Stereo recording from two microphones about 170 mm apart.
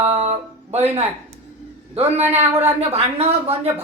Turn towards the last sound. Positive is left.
turn(degrees=-35)  # may be behind; listen again after turning